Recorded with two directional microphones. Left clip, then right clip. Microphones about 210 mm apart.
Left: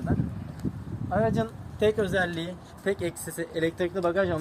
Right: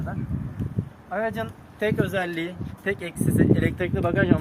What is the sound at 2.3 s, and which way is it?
Speech, 20° left (ahead or behind).